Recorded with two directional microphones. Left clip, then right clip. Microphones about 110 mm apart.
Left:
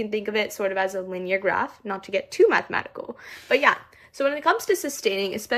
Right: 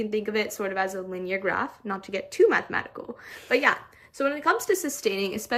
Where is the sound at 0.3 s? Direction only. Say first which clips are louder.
Left 5 dB; 5° left (ahead or behind).